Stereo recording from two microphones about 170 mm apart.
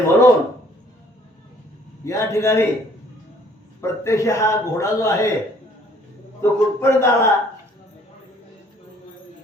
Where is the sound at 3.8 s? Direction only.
15° left (ahead or behind).